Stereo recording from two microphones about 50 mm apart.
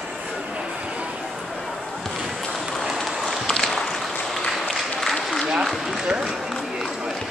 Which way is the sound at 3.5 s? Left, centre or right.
Centre.